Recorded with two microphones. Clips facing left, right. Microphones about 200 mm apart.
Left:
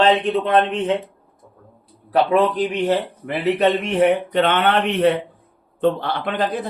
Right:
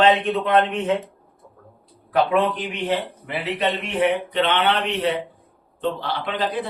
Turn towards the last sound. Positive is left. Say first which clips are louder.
# left 2 dB
turn(degrees=45)  # may be behind; listen again after turning